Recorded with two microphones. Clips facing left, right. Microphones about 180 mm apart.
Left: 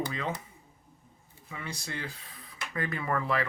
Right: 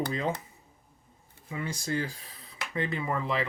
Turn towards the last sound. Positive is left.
turn(degrees=-20)  # may be behind; listen again after turning